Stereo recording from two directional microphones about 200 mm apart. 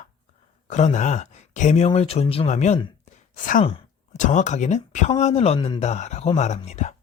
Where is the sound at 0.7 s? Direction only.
35° left (ahead or behind).